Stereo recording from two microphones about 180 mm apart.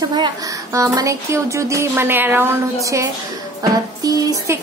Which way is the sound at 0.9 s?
15° right (ahead or behind).